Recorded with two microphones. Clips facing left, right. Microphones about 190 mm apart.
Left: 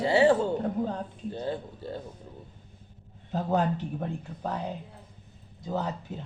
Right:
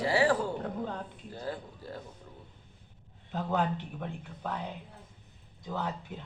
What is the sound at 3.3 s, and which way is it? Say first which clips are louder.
A man's voice: left 4 dB; 40° left (ahead or behind).